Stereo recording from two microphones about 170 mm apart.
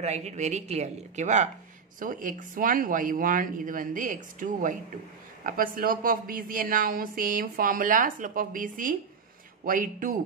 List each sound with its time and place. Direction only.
0.0 s a woman's voice: 40° right (ahead or behind)